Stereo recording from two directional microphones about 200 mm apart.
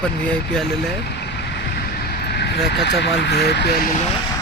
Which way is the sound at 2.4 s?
60° left (ahead or behind).